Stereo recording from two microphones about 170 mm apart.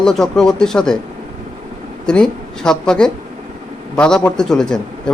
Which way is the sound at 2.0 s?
5° left (ahead or behind).